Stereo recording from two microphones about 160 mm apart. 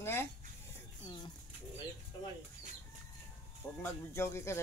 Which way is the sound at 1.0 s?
30° left (ahead or behind).